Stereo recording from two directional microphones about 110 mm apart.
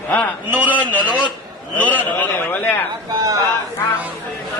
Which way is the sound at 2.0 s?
15° left (ahead or behind).